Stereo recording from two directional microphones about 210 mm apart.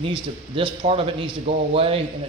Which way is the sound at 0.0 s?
25° right (ahead or behind).